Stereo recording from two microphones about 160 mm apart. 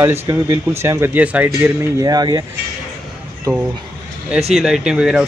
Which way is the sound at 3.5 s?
25° right (ahead or behind).